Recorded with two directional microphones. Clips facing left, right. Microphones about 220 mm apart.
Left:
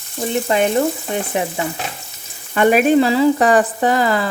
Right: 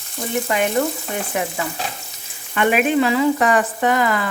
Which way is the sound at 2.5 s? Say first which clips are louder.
Left 5 dB; 40° left (ahead or behind).